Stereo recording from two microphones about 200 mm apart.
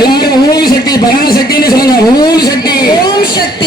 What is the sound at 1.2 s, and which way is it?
Speech, 50° left (ahead or behind).